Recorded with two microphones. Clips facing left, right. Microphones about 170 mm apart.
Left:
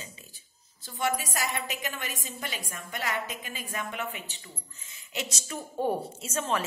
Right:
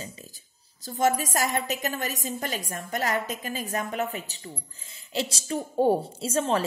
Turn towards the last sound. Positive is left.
turn(degrees=-35)  # may be behind; listen again after turning